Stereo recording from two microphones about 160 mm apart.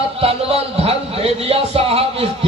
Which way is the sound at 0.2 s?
40° right (ahead or behind).